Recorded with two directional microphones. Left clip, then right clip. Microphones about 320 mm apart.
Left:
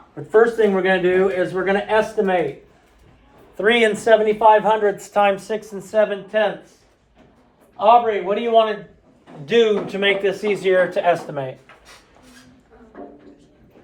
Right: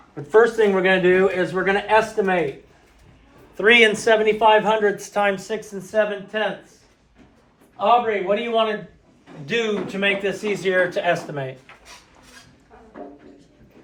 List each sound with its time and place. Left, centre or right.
0.2 s a man's voice: centre
3.6 s speech: centre; by 6.5 s left
7.8 s speech: left